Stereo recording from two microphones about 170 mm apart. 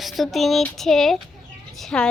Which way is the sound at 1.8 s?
5° left (ahead or behind).